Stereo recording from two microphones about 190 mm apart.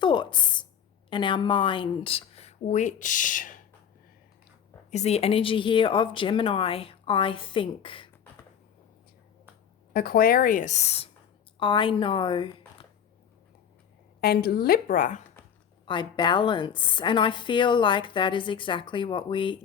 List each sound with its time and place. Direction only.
0.0 s a sound: 25° left (ahead or behind)
1.1 s a woman's voice: 25° left (ahead or behind); by 3.6 s 45° left (ahead or behind)
4.9 s a woman's voice: 35° left (ahead or behind)
9.9 s a woman's voice: 50° left (ahead or behind); by 12.5 s 25° left (ahead or behind)
14.2 s a woman's voice: 55° left (ahead or behind)
15.9 s a woman's voice: 25° left (ahead or behind)